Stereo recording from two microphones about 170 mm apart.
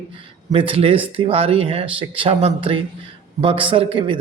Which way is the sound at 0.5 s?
30° right (ahead or behind).